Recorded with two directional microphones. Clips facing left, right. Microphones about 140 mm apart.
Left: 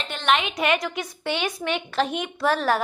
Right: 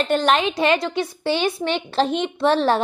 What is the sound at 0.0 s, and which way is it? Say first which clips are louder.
A woman's voice: right 6 dB; 40° right (ahead or behind).